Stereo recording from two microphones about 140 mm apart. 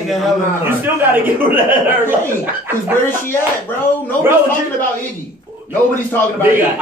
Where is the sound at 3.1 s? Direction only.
15° left (ahead or behind).